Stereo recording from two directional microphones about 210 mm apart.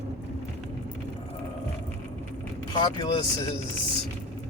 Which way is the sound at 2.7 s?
20° left (ahead or behind).